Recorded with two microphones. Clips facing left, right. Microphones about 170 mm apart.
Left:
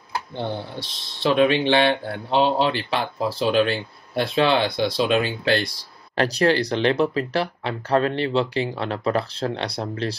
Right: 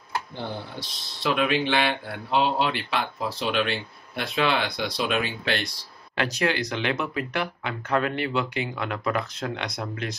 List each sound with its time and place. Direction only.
0.7 s speech: 25° left (ahead or behind)